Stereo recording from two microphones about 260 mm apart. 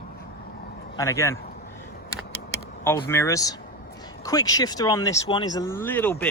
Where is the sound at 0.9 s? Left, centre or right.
Centre.